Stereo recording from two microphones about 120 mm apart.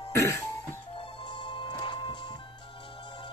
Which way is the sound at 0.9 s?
40° left (ahead or behind).